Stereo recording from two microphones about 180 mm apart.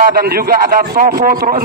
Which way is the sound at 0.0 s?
55° right (ahead or behind).